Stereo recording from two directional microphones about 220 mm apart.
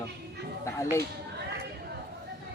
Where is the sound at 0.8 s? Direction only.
15° left (ahead or behind).